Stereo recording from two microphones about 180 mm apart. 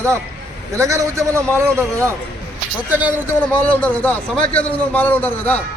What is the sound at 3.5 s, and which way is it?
A man's voice, 10° left (ahead or behind).